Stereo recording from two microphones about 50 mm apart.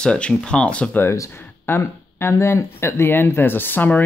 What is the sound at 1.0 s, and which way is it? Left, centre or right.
Speech, left.